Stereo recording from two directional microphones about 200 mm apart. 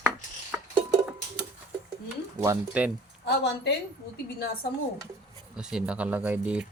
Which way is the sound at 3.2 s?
55° left (ahead or behind).